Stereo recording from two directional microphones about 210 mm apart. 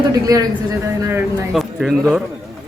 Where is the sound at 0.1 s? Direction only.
15° right (ahead or behind).